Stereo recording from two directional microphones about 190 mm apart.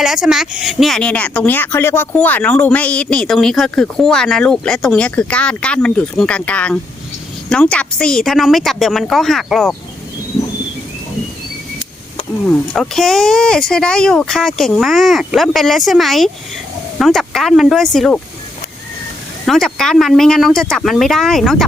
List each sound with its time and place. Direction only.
0.0 s speech: centre (ahead or behind)
12.7 s speech: centre (ahead or behind)
19.5 s speech: centre (ahead or behind)